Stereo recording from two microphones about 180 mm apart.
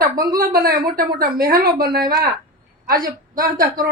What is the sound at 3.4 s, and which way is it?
Speech, 20° right (ahead or behind).